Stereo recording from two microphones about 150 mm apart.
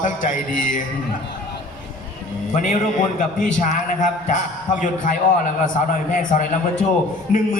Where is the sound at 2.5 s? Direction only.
60° left (ahead or behind).